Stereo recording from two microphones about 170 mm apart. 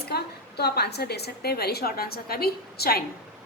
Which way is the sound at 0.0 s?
70° left (ahead or behind).